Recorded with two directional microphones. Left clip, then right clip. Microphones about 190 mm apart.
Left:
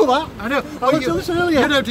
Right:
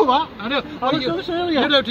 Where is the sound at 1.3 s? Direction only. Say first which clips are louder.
Left 4 dB; 10° right (ahead or behind).